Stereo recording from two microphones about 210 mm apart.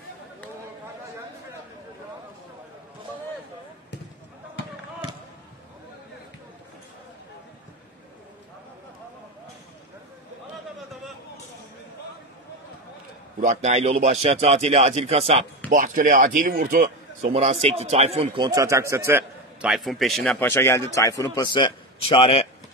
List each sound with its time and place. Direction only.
13.4 s a man's voice: 35° right (ahead or behind)
15.7 s speech: 40° right (ahead or behind); by 22.5 s 25° left (ahead or behind)